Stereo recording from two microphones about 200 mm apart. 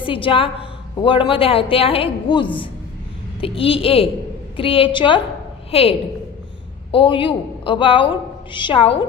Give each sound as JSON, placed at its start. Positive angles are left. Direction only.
{"t": 0.0, "sound": "a woman's voice", "side_deg": 25}